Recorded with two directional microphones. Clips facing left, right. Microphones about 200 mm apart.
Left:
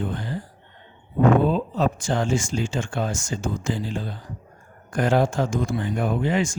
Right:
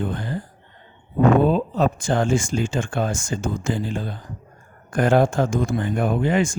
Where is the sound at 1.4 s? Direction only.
55° right (ahead or behind).